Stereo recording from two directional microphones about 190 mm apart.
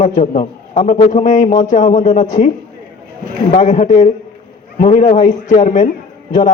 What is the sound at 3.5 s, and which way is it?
A man's voice, 40° left (ahead or behind).